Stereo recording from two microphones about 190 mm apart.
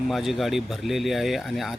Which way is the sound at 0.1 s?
Centre (ahead or behind).